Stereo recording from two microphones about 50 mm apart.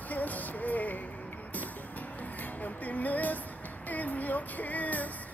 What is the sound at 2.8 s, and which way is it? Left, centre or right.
Music, left.